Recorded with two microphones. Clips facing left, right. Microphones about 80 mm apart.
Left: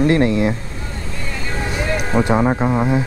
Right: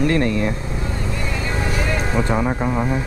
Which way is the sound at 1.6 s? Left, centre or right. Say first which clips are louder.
Left 2 dB; centre.